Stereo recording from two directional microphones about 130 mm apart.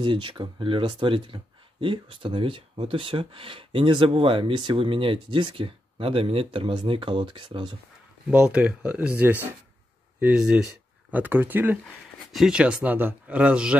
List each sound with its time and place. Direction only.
0.0 s speech: 40° right (ahead or behind)
8.3 s speech: 10° right (ahead or behind)
12.3 s speech: 5° right (ahead or behind)